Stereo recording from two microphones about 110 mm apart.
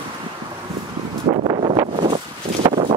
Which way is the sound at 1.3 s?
45° right (ahead or behind).